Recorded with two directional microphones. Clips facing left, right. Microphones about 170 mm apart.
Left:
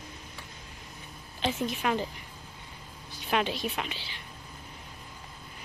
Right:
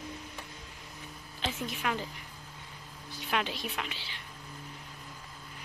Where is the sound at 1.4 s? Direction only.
25° left (ahead or behind).